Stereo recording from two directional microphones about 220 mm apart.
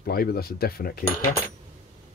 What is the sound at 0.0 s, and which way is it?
Speech, 45° left (ahead or behind).